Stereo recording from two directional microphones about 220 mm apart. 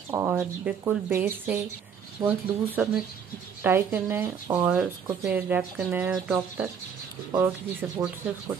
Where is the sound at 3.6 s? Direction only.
10° right (ahead or behind).